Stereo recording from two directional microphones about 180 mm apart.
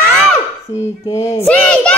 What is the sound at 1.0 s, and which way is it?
Child singing, 20° left (ahead or behind).